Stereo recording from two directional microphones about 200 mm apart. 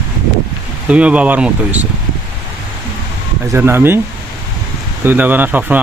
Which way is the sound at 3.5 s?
10° right (ahead or behind).